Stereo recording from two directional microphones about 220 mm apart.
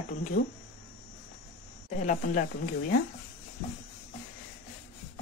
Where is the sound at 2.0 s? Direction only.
35° left (ahead or behind).